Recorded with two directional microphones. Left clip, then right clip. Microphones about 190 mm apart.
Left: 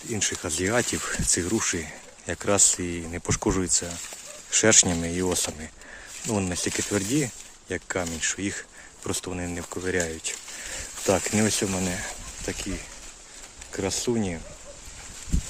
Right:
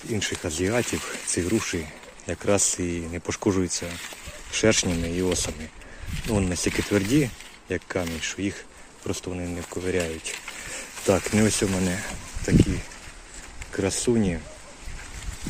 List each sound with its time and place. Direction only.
0.1 s speech: 10° left (ahead or behind)
11.0 s speech: 5° left (ahead or behind)
13.7 s speech: 5° left (ahead or behind)